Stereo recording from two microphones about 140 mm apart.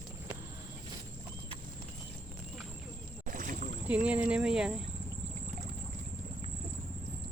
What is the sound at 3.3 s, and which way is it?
Boat, 75° right (ahead or behind).